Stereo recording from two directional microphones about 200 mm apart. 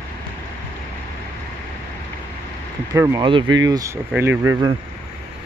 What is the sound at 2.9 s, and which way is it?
Speech, 15° right (ahead or behind).